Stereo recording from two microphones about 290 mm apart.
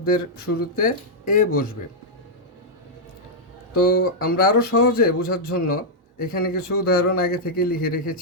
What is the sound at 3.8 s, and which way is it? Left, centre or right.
A man's voice, left.